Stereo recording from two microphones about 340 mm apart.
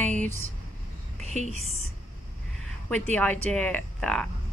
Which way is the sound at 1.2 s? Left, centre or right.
Centre.